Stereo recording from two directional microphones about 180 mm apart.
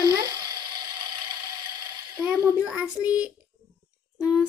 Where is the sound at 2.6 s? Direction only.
5° right (ahead or behind).